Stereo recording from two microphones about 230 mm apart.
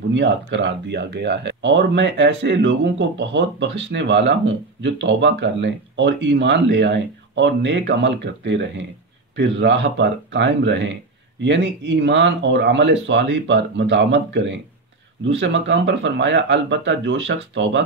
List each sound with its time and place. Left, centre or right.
0.1 s speech: right